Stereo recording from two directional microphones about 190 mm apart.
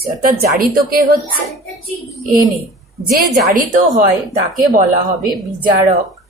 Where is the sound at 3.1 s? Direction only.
50° right (ahead or behind).